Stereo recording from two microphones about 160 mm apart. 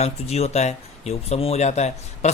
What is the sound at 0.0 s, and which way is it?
A man's voice, 40° left (ahead or behind).